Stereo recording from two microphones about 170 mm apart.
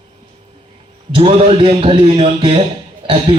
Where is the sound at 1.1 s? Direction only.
35° right (ahead or behind).